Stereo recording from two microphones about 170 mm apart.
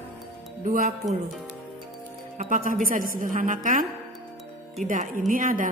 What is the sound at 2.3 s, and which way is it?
Speech, 50° right (ahead or behind).